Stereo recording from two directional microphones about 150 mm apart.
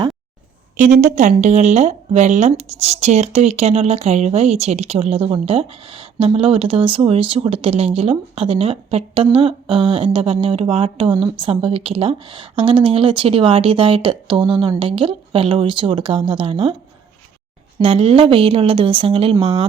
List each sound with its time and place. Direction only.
0.8 s speech: 55° right (ahead or behind); by 16.7 s 35° right (ahead or behind)
17.8 s speech: 40° right (ahead or behind)